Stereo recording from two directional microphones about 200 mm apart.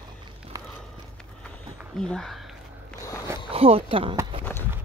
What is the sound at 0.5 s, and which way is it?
Walk, 15° right (ahead or behind).